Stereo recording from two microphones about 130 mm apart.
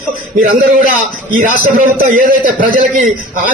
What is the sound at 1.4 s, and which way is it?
A man's voice, 90° right.